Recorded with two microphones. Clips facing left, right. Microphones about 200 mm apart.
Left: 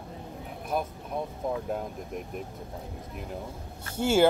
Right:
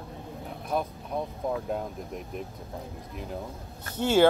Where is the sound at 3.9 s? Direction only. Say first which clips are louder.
Right 1 dB; 10° left (ahead or behind).